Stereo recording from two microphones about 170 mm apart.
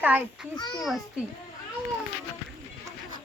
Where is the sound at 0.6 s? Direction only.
25° left (ahead or behind).